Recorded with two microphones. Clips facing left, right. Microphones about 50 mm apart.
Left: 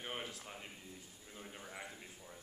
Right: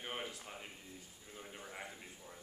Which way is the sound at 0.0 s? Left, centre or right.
Centre.